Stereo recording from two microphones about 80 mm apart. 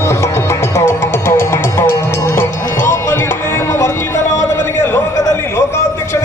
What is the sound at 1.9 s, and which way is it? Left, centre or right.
Music, left.